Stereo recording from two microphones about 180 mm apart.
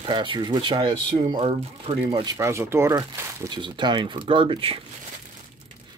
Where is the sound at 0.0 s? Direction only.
25° right (ahead or behind).